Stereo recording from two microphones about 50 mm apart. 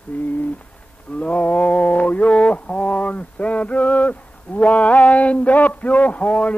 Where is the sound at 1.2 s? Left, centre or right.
Left.